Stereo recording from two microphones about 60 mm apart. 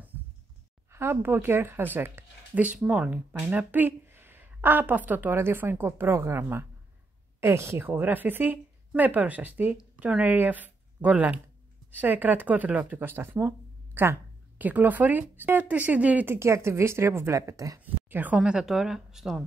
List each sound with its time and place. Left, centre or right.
0.9 s speech: right
2.5 s a woman's voice: right
5.4 s a woman's voice: right
7.8 s speech: right
13.0 s speech: right
14.6 s speech: right
16.3 s a woman's voice: right
17.8 s speech: right
18.4 s speech: centre